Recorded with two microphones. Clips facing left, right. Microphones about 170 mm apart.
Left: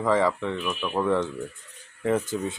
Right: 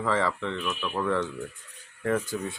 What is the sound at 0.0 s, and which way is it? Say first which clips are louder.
Speech: left 4 dB; 15° left (ahead or behind).